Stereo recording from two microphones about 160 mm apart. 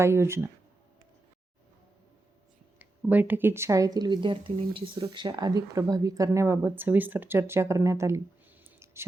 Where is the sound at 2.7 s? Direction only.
10° right (ahead or behind).